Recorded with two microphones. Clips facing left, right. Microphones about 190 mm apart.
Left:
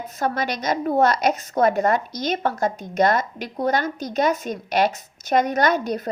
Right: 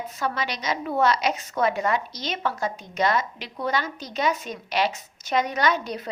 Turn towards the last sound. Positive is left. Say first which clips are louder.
# left 4 dB
turn(degrees=45)  # may be behind; listen again after turning